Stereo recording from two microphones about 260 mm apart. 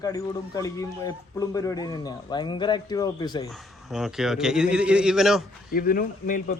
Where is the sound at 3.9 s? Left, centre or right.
Centre.